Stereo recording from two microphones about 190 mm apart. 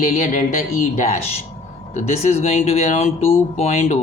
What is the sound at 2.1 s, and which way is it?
Speech, 35° left (ahead or behind).